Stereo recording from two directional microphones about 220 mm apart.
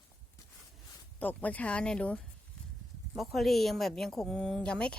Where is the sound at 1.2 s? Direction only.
10° left (ahead or behind).